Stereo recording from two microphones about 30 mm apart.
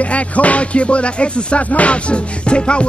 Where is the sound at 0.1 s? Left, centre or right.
Left.